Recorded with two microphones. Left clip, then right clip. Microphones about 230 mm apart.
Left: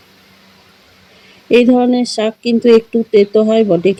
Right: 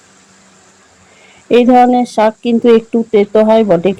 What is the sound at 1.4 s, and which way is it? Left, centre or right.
Speech, right.